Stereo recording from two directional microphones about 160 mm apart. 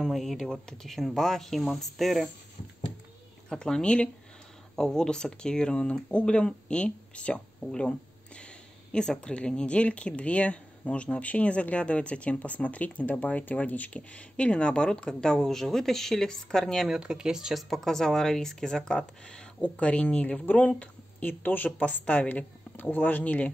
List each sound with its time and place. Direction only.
0.0 s speech: centre (ahead or behind)
3.4 s speech: 5° left (ahead or behind)
8.9 s speech: 5° left (ahead or behind)